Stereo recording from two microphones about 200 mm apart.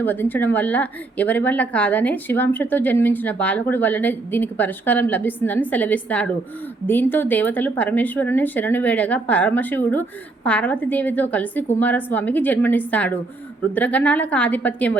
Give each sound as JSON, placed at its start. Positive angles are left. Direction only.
{"t": 0.0, "sound": "speech", "side_deg": 10}